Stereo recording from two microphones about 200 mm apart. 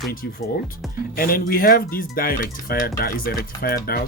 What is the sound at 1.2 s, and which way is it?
Speech, 45° left (ahead or behind).